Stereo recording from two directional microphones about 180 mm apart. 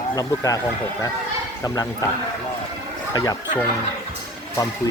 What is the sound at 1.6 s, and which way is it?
Speech, 20° left (ahead or behind).